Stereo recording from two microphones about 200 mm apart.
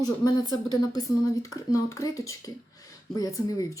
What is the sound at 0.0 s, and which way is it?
Speech, 20° left (ahead or behind).